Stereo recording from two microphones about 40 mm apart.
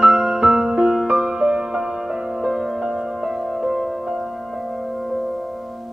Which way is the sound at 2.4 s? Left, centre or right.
Centre.